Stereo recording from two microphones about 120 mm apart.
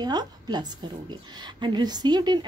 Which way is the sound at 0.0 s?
35° right (ahead or behind).